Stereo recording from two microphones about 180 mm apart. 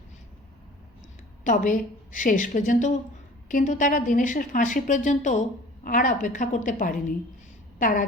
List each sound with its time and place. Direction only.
1.5 s a woman's voice: 45° left (ahead or behind)